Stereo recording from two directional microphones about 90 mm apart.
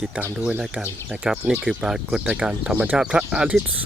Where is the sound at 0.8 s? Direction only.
10° right (ahead or behind).